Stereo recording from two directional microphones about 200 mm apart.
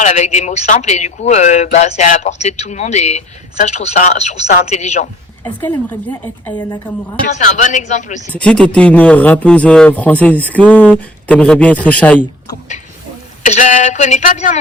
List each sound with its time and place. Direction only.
0.0 s speech: 35° left (ahead or behind)
5.4 s a man's voice: 10° left (ahead or behind)
7.3 s speech: 40° left (ahead or behind)
8.4 s a man's voice: 5° left (ahead or behind)
13.4 s speech: 40° left (ahead or behind)